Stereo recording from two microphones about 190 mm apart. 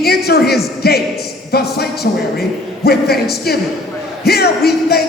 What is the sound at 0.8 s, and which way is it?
Speech, 55° left (ahead or behind).